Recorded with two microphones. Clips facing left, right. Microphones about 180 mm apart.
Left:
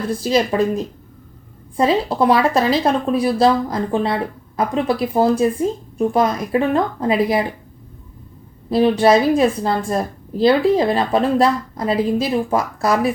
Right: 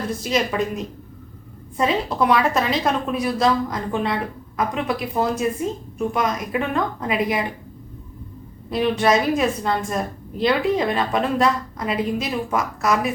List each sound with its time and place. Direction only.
0.2 s a woman's voice: 35° left (ahead or behind)
8.7 s a woman's voice: 35° left (ahead or behind)